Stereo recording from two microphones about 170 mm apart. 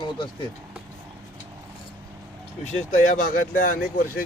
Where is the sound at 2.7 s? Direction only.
45° left (ahead or behind).